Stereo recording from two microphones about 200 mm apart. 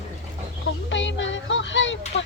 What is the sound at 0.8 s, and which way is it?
Music, 70° left (ahead or behind).